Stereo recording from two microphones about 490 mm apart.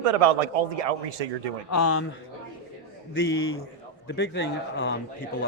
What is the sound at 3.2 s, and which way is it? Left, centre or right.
Speech, left.